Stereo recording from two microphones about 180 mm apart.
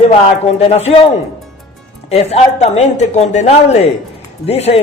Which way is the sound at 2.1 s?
35° left (ahead or behind).